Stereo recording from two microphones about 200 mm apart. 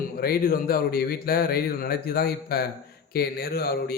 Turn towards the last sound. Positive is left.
turn(degrees=50)  # may be behind; listen again after turning